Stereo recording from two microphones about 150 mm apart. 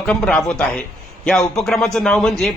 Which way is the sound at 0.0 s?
5° left (ahead or behind).